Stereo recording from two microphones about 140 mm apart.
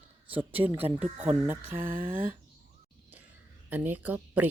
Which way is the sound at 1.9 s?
90° right.